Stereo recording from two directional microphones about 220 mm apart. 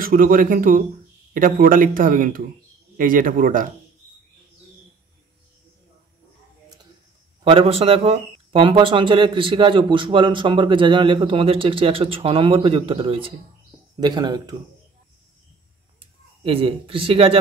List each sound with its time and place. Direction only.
0.0 s speech: 40° right (ahead or behind)
7.4 s speech: 25° right (ahead or behind)
16.0 s speech: 25° right (ahead or behind)